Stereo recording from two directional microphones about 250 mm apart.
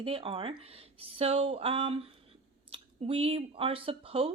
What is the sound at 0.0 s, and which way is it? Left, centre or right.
A woman's voice, right.